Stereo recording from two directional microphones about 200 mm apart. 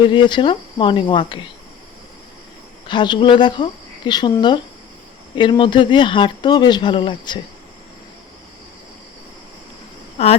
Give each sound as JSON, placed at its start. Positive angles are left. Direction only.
{"t": 0.0, "sound": "speech", "side_deg": 25}
{"t": 2.8, "sound": "speech", "side_deg": 25}